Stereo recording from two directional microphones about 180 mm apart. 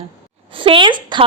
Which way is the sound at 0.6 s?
25° right (ahead or behind).